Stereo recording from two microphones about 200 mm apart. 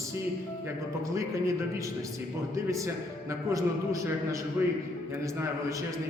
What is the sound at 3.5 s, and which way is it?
Speech, 15° right (ahead or behind).